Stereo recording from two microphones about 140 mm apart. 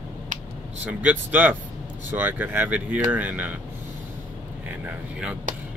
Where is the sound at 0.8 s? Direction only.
10° right (ahead or behind).